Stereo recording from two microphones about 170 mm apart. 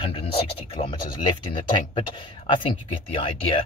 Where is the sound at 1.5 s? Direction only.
30° left (ahead or behind).